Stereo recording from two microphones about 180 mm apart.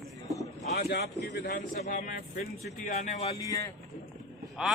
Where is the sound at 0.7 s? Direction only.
65° left (ahead or behind).